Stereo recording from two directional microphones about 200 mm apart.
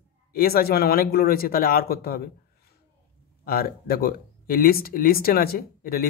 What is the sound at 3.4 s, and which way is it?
Speech, 50° left (ahead or behind).